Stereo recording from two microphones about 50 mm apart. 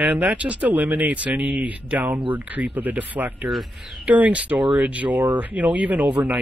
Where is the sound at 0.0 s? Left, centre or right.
Right.